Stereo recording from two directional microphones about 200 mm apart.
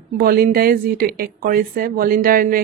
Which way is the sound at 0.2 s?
50° right (ahead or behind).